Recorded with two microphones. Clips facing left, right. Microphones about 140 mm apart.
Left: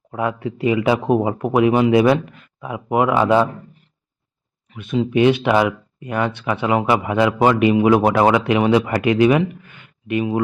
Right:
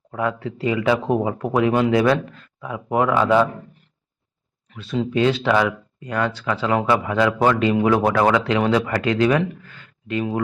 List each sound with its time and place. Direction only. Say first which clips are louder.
0.1 s speech: left 2 dB; 20° left (ahead or behind)
5.1 s speech: left 3 dB; 20° left (ahead or behind)